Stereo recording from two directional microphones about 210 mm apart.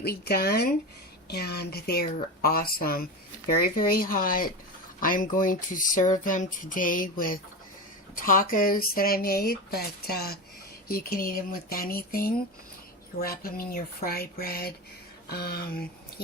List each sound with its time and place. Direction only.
0.0 s speech: 50° left (ahead or behind)